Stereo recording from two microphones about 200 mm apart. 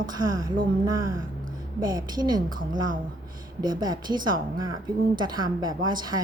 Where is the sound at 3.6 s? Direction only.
20° right (ahead or behind).